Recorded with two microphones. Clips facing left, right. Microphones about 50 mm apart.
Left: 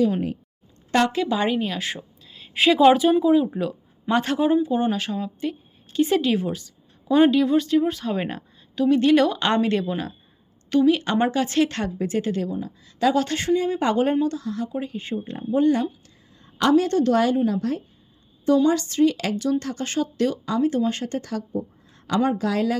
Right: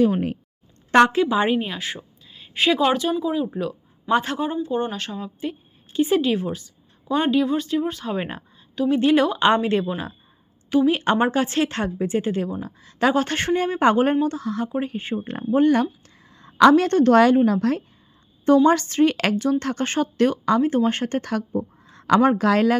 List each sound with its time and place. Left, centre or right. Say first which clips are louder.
0.9 s speech: right 5 dB; right
1.8 s speech: left 1 dB; centre
8.9 s speech: left 1 dB; centre
12.6 s speech: right 1 dB; right
13.9 s speech: right 1 dB; right
15.3 s speech: right 2 dB; right
16.4 s a woman's voice: right 5 dB; right
17.3 s a woman's voice: right 4 dB; right
18.4 s speech: right 3 dB; right
19.1 s speech: right 4 dB; right
19.4 s speech: right 2 dB; right
20.6 s speech: right 2 dB; right